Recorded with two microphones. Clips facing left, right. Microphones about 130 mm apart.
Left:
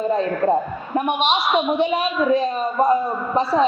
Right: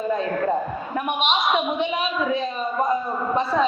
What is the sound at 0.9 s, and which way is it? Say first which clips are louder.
A woman's voice: left 4 dB; 35° left (ahead or behind).